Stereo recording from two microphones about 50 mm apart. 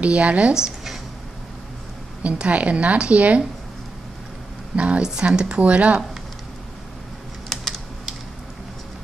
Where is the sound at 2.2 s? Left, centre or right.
Right.